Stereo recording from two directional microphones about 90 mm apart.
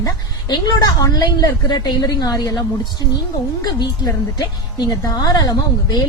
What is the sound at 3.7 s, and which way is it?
Speech, 50° left (ahead or behind).